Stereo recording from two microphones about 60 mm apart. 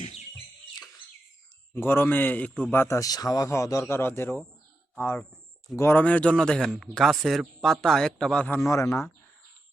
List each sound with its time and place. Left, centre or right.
1.7 s a man's voice: left
2.7 s a man's voice: left
3.0 s a man's voice: left
3.5 s speech: left
3.8 s a man's voice: left
5.9 s speech: left
8.6 s speech: left